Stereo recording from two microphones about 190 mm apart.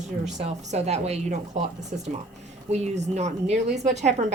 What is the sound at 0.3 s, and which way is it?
A woman's voice, 35° right (ahead or behind).